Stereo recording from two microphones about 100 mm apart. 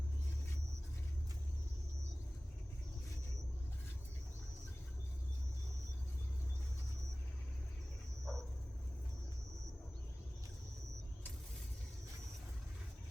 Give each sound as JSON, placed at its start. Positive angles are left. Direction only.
{"t": 8.2, "sound": "dog", "side_deg": 5}